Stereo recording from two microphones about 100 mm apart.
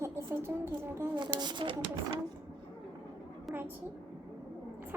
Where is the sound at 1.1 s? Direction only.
50° right (ahead or behind).